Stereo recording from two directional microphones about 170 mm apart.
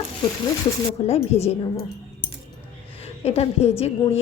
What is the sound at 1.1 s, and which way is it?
Speech, 40° left (ahead or behind).